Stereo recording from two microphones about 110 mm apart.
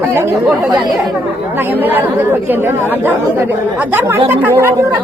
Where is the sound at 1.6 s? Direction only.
20° right (ahead or behind).